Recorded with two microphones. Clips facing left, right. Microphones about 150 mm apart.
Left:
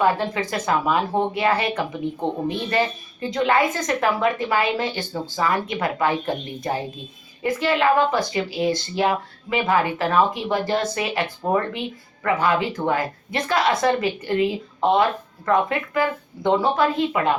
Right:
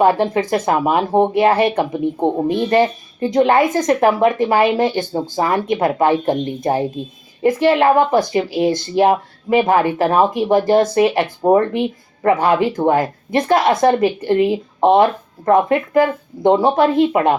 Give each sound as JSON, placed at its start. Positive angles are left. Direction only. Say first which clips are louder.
{"t": 0.0, "sound": "speech", "louder": "right 6 dB", "side_deg": -50}